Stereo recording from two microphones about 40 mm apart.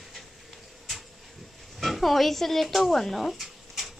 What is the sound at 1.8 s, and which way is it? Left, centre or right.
Speech, centre.